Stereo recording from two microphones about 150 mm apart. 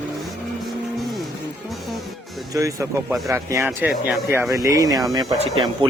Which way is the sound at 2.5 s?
20° right (ahead or behind).